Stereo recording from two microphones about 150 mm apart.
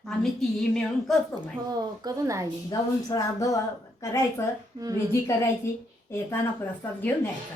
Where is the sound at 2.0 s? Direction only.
20° right (ahead or behind).